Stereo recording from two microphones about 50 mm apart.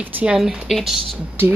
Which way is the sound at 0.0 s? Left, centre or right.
Right.